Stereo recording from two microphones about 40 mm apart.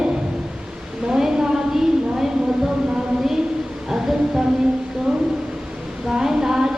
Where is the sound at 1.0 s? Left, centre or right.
Centre.